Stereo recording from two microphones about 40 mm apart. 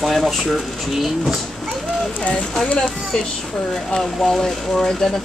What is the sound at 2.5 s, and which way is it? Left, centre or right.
Speech, centre.